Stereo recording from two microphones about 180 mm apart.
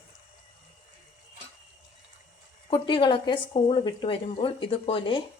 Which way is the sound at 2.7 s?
25° left (ahead or behind).